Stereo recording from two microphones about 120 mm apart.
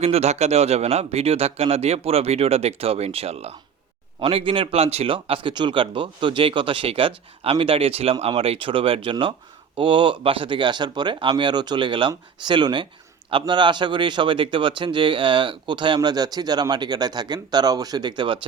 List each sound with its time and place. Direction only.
0.0 s speech: 60° right (ahead or behind); by 18.3 s 40° right (ahead or behind)